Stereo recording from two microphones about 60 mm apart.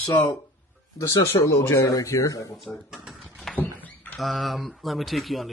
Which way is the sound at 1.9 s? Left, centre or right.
Left.